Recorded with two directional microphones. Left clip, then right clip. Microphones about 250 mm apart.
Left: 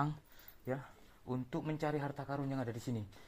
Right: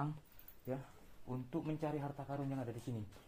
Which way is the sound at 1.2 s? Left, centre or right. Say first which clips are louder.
Left 3 dB; left.